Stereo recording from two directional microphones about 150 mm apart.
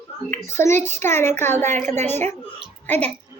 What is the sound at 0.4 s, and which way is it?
A woman's voice, 15° left (ahead or behind).